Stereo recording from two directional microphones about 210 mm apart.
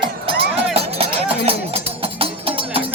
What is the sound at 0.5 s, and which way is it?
Music, 30° right (ahead or behind).